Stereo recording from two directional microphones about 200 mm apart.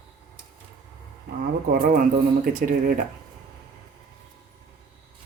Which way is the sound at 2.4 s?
40° right (ahead or behind).